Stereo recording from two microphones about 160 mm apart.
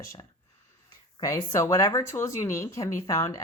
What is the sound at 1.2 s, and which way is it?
Speech, 20° left (ahead or behind).